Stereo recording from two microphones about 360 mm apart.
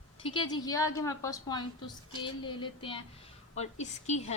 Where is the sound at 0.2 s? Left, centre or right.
Centre.